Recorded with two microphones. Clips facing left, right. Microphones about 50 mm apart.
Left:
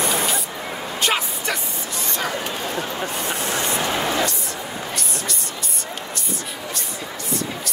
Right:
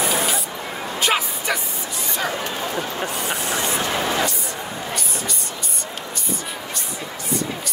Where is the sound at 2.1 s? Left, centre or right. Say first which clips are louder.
Right 1 dB; centre.